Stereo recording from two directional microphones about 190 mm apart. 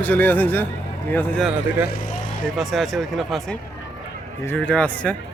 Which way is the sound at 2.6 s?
Centre (ahead or behind).